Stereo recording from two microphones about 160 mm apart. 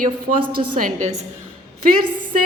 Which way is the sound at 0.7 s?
55° right (ahead or behind).